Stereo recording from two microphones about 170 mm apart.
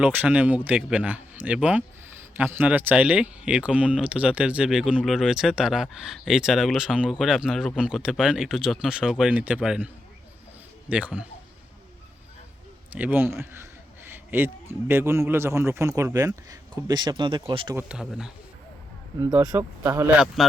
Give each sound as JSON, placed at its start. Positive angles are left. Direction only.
{"t": 0.0, "sound": "speech", "side_deg": -10}
{"t": 12.9, "sound": "speech", "side_deg": -10}
{"t": 17.7, "sound": "speech", "side_deg": -5}
{"t": 19.2, "sound": "speech", "side_deg": -20}
{"t": 20.1, "sound": "speech", "side_deg": 0}